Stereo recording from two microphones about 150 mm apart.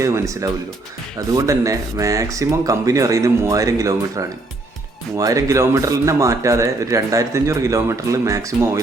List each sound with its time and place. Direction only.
0.0 s speech: 20° right (ahead or behind)
5.1 s speech: 20° right (ahead or behind)